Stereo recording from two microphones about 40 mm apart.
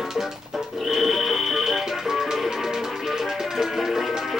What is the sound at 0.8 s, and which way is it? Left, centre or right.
Music, centre.